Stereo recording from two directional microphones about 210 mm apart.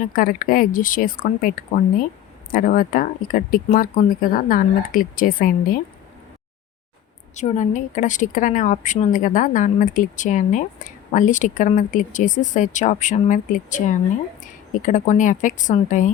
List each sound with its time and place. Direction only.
0.0 s a woman's voice: 40° left (ahead or behind)
7.3 s a woman's voice: 35° left (ahead or behind)